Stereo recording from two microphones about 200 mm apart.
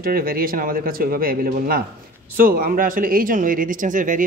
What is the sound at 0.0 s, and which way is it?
Speech, 45° right (ahead or behind).